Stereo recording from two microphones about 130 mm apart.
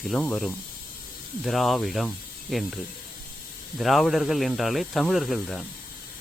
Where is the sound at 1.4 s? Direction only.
Centre (ahead or behind).